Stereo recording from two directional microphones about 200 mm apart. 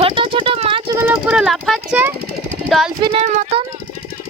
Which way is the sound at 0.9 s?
5° right (ahead or behind).